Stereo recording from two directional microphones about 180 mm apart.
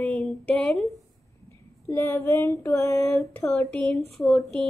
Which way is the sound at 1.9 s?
10° left (ahead or behind).